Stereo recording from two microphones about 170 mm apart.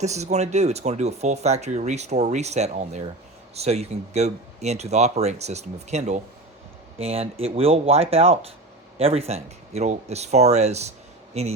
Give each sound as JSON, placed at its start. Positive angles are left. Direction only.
{"t": 0.0, "sound": "speech", "side_deg": -40}